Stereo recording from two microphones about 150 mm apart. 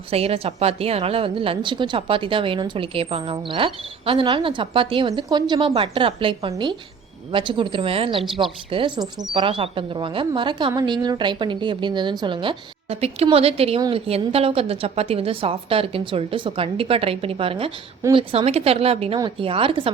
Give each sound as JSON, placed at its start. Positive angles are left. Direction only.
{"t": 0.1, "sound": "a woman's voice", "side_deg": -40}